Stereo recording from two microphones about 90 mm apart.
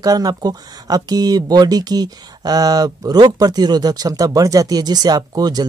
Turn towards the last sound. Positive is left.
turn(degrees=-50)  # may be behind; listen again after turning